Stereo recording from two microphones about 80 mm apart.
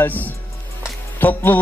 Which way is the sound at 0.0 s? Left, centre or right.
Left.